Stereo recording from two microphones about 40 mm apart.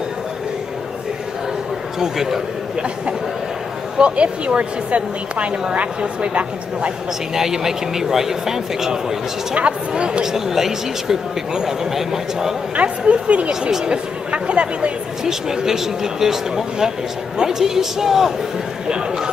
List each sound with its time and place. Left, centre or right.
2.0 s speech: centre
4.0 s a woman's voice: right
7.3 s speech: centre
9.6 s a woman's voice: right
10.2 s speech: centre
12.7 s a woman's voice: right
13.5 s speech: centre
14.3 s a woman's voice: right
15.2 s speech: centre